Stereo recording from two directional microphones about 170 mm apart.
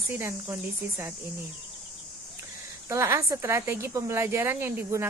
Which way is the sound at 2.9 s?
15° right (ahead or behind).